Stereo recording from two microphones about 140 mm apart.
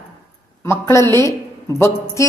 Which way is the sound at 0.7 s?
15° left (ahead or behind).